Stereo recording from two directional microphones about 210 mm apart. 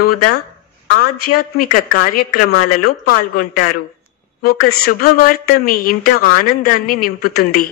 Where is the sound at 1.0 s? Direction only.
90° left.